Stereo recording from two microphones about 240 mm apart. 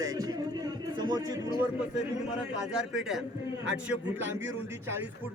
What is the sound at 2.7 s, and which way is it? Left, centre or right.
A man's voice, centre.